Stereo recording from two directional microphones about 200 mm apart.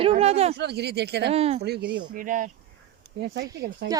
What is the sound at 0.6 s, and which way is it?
Speech, 55° right (ahead or behind).